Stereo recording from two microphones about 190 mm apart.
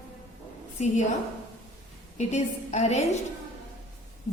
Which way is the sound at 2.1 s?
35° left (ahead or behind).